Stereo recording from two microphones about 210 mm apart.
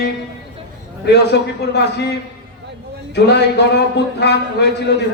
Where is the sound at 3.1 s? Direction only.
55° left (ahead or behind).